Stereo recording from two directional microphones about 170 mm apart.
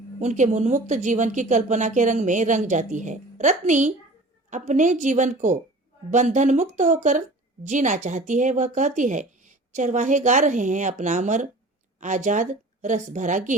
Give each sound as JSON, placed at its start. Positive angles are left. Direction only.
{"t": 0.2, "sound": "speech", "side_deg": -45}